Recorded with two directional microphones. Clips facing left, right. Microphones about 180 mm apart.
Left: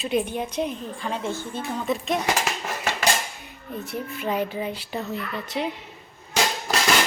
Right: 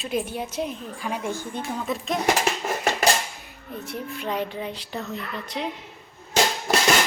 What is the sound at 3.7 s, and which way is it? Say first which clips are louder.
A woman's voice: left 1 dB; centre (ahead or behind).